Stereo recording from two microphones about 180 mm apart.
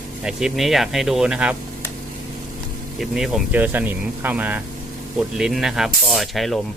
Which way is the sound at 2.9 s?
Centre (ahead or behind).